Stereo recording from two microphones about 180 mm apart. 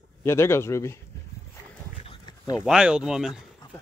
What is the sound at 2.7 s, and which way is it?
Speech, 5° right (ahead or behind).